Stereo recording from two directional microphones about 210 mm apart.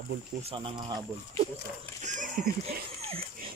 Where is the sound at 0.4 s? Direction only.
25° right (ahead or behind).